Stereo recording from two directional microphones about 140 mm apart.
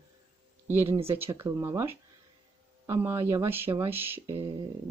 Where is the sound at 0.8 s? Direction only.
40° right (ahead or behind).